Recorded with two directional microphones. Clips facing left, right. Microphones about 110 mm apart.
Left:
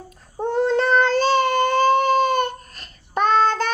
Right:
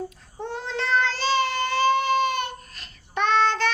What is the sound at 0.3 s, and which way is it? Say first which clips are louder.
Child singing: left 11 dB; 45° left (ahead or behind).